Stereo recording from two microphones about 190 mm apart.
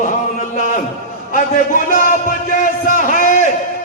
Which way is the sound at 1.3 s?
45° left (ahead or behind).